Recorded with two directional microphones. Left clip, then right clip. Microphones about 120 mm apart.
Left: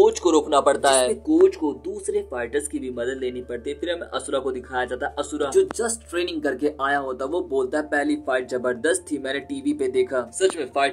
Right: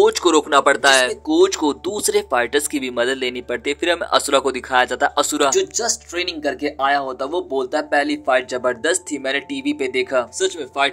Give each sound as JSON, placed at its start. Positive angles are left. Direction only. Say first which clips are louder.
{"t": 0.0, "sound": "speech", "louder": "right 3 dB", "side_deg": -40}
{"t": 1.4, "sound": "speech", "louder": "right 4 dB", "side_deg": -45}
{"t": 5.5, "sound": "speech", "louder": "right 2 dB", "side_deg": -15}